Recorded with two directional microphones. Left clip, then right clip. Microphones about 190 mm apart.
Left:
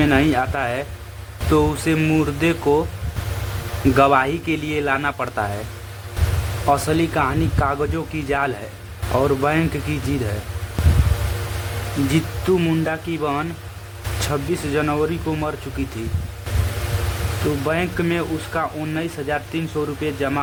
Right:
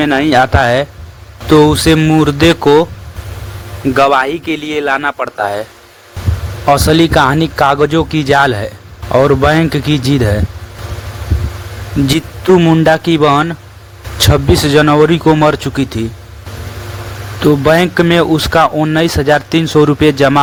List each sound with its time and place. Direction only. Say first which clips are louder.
0.0 s speech: right 8 dB; 45° right (ahead or behind)
3.9 s speech: right 6 dB; 45° right (ahead or behind)
6.7 s speech: right 10 dB; 35° right (ahead or behind)
12.5 s speech: right 13 dB; 40° right (ahead or behind)
12.9 s speech: right 14 dB; 50° right (ahead or behind)
17.7 s speech: right 12 dB; 50° right (ahead or behind)